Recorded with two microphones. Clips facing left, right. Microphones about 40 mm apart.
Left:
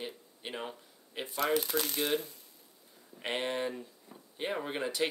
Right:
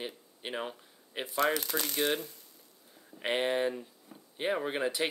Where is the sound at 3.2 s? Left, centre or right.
Centre.